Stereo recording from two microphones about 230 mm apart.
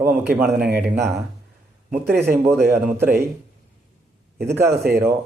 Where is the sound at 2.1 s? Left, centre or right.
Centre.